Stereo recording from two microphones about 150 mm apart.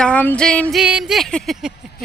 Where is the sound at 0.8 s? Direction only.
5° right (ahead or behind).